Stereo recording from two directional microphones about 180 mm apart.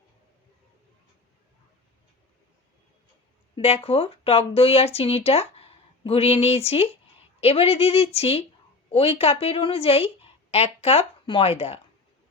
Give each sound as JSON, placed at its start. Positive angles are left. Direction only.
{"t": 3.5, "sound": "a woman's voice", "side_deg": 35}